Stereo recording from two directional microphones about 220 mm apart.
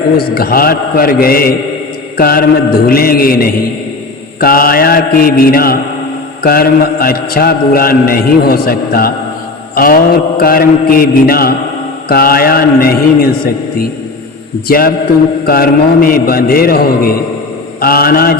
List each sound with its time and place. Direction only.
0.2 s a man's voice: 45° left (ahead or behind)
2.1 s mantra: 40° left (ahead or behind)
6.4 s a man's voice: 45° left (ahead or behind)
14.7 s mantra: 40° left (ahead or behind)
15.4 s a man's voice: 40° left (ahead or behind)